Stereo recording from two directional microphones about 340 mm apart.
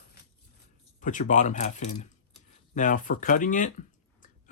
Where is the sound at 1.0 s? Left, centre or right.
Left.